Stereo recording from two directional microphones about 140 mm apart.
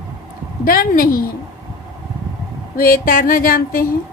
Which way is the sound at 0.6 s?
90° left.